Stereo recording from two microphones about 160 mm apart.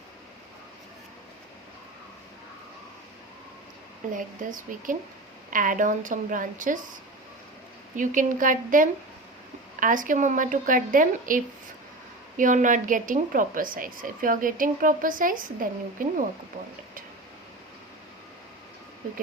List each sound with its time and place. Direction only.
4.1 s a woman's voice: 55° right (ahead or behind)
7.9 s a woman's voice: 55° right (ahead or behind)